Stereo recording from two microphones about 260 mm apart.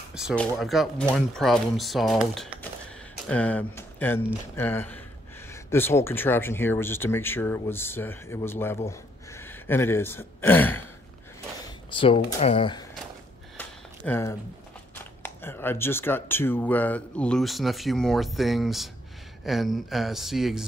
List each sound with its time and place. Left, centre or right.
0.1 s speech: centre
11.9 s speech: centre
13.6 s a sound: centre
15.2 s speech: centre